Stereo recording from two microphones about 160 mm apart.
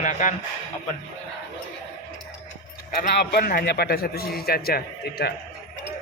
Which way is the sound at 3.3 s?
70° left (ahead or behind).